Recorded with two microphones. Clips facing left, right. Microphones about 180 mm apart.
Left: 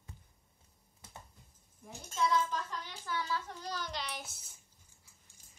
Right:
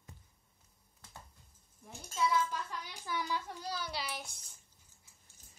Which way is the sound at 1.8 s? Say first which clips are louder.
Even; centre (ahead or behind).